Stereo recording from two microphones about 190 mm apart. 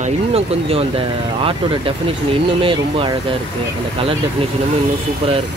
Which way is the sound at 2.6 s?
25° right (ahead or behind).